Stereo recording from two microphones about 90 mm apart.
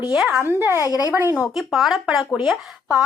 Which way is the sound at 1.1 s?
20° right (ahead or behind).